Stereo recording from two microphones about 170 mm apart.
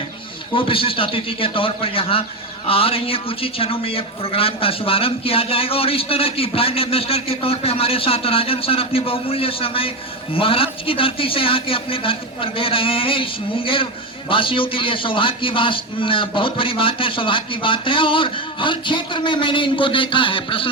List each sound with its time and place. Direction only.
0.5 s a man's voice: 30° left (ahead or behind)